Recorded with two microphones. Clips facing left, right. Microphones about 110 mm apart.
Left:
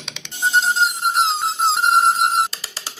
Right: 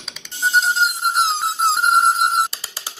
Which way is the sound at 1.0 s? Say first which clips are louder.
Even; centre (ahead or behind).